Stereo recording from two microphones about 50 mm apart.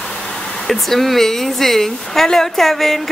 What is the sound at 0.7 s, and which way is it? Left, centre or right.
A woman's voice, centre.